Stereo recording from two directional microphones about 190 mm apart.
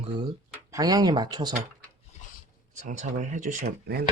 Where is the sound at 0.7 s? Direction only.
20° right (ahead or behind).